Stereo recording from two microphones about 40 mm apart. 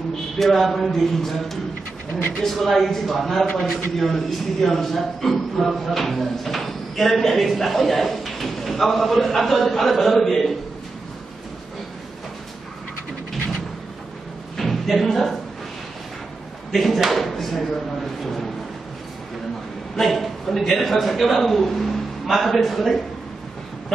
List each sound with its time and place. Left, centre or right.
0.4 s a man's voice: centre
14.6 s a sound: centre
15.0 s a man's voice: centre
16.7 s a man's voice: centre
17.1 s a sound: centre
20.0 s a man's voice: centre